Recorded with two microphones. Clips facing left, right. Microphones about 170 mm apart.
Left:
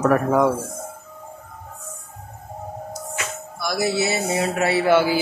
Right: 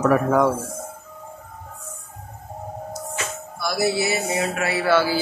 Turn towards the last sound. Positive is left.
turn(degrees=15)  # may be behind; listen again after turning